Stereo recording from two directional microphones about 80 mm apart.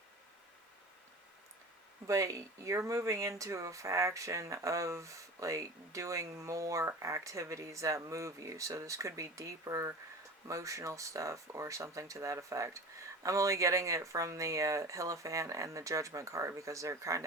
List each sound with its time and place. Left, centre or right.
2.0 s speech: right